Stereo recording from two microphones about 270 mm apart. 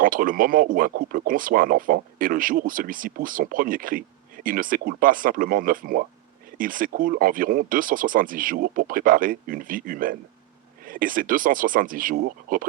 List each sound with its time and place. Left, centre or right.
0.0 s speech: right